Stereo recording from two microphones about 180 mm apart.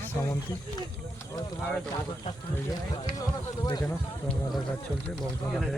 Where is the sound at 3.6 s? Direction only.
20° left (ahead or behind).